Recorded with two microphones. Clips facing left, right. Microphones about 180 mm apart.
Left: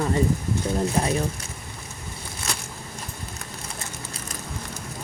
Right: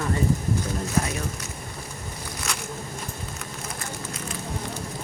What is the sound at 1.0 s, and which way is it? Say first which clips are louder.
Speech: right 1 dB; 30° left (ahead or behind).